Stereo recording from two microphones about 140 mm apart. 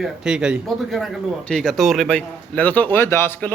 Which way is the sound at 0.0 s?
5° right (ahead or behind).